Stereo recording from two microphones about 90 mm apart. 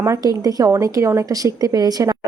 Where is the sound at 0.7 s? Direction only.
30° right (ahead or behind).